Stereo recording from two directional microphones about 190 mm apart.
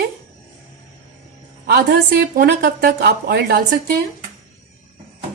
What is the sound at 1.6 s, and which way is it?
Speech, 55° right (ahead or behind).